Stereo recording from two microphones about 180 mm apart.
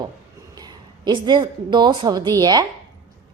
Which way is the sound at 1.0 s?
25° right (ahead or behind).